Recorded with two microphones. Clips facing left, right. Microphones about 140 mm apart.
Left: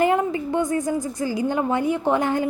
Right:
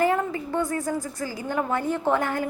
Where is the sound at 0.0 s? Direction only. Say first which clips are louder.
Left 3 dB; 20° left (ahead or behind).